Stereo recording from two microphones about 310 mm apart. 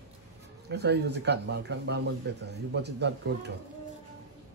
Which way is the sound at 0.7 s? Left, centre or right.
Right.